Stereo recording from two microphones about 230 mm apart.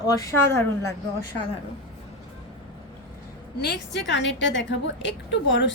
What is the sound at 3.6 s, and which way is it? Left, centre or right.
A woman's voice, left.